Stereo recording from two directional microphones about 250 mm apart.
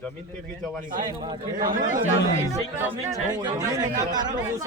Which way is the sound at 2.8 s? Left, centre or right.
Centre.